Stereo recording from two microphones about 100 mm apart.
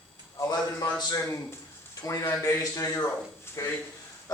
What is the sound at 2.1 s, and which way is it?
A man's voice, 35° left (ahead or behind).